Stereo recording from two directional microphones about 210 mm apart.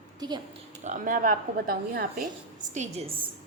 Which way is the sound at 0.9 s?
40° right (ahead or behind).